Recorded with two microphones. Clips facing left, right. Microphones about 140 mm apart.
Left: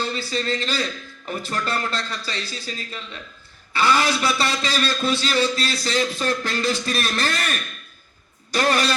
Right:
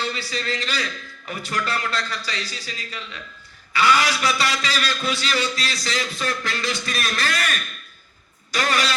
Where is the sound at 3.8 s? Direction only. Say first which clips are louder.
Even; 30° left (ahead or behind).